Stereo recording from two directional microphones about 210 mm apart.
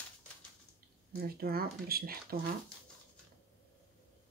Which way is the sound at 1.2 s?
45° right (ahead or behind).